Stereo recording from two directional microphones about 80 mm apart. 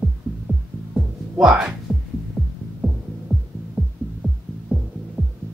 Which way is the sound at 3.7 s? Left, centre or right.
Centre.